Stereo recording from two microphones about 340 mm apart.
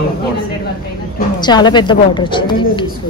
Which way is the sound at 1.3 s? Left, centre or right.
Centre.